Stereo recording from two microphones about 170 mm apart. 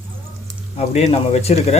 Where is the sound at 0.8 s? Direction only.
35° left (ahead or behind).